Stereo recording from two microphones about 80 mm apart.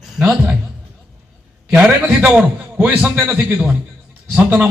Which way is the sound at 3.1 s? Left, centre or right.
Right.